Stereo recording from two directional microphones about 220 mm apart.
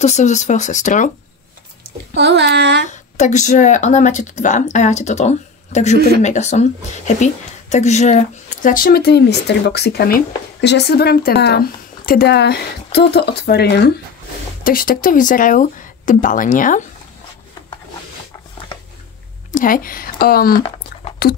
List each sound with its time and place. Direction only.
0.0 s speech: 30° left (ahead or behind)
2.1 s a child's voice: 50° right (ahead or behind)
2.9 s speech: 30° left (ahead or behind)
5.9 s a child's voice: 45° right (ahead or behind)
6.2 s speech: 30° left (ahead or behind)
19.5 s speech: 40° left (ahead or behind)